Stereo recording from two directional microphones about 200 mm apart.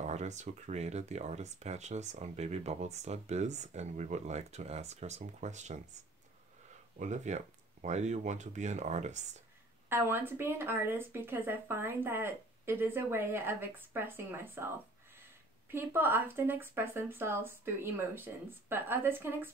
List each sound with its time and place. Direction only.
0.0 s speech: 35° right (ahead or behind)
7.0 s speech: 35° right (ahead or behind)
9.8 s speech: 10° right (ahead or behind)
15.7 s speech: 10° right (ahead or behind)